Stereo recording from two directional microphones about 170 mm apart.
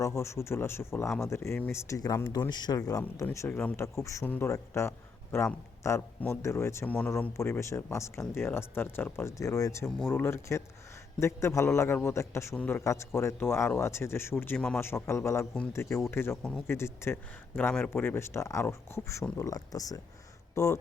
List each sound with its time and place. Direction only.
0.0 s speech: 15° left (ahead or behind)